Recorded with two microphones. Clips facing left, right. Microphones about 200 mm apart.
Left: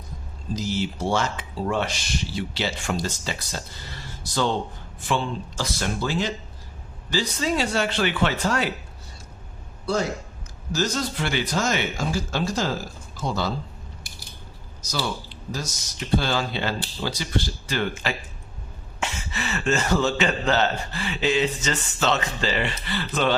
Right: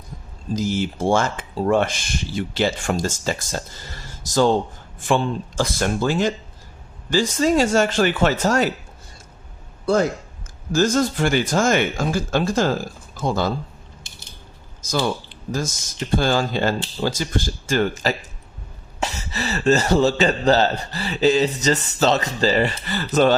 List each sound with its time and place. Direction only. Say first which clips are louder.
0.5 s speech: right 4 dB; 50° right (ahead or behind)
9.8 s a man's voice: right 6 dB; 50° right (ahead or behind)
14.0 s mechanisms: left 1 dB; 25° right (ahead or behind)
14.8 s a man's voice: right 6 dB; 50° right (ahead or behind)